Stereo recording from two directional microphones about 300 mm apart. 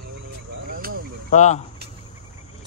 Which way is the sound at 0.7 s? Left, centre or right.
Right.